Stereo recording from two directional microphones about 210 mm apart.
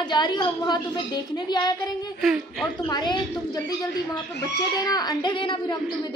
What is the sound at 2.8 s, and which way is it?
Speech, 20° left (ahead or behind).